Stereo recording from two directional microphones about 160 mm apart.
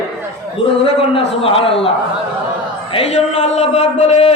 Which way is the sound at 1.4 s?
35° left (ahead or behind).